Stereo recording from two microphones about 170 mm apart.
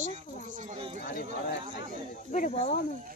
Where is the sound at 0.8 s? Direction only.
35° right (ahead or behind).